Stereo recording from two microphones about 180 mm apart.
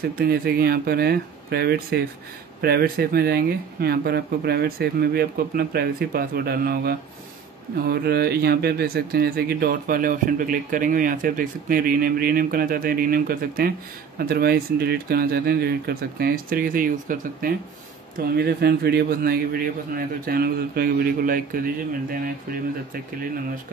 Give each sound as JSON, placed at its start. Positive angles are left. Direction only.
{"t": 0.2, "sound": "speech", "side_deg": -55}